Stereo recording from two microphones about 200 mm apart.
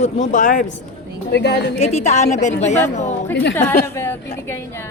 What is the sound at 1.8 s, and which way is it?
A woman's voice, 35° left (ahead or behind).